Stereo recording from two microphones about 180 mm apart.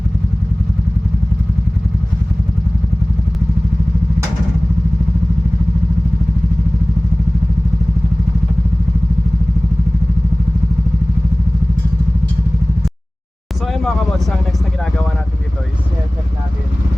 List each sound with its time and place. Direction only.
13.7 s vehicle: centre (ahead or behind)